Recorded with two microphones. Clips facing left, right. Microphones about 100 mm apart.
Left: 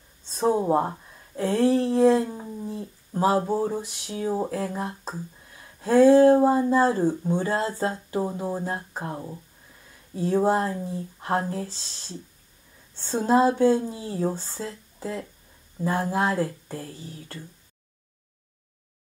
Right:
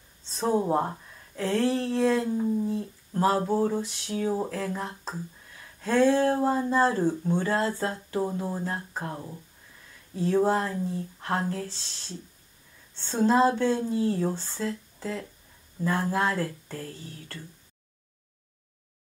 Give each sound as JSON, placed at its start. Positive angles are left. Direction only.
{"t": 0.4, "sound": "speech", "side_deg": 10}